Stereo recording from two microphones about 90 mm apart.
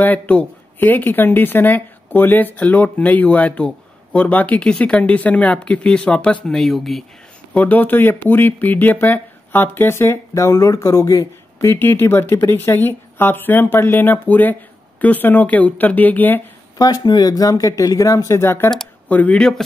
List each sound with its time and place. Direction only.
0.0 s speech: 15° left (ahead or behind); by 7.1 s centre (ahead or behind)
7.5 s speech: 20° left (ahead or behind)
16.7 s speech: 45° left (ahead or behind); by 18.7 s 25° left (ahead or behind)
19.0 s speech: 15° left (ahead or behind)